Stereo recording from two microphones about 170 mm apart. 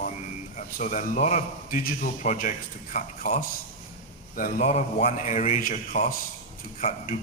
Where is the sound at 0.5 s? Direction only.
45° left (ahead or behind).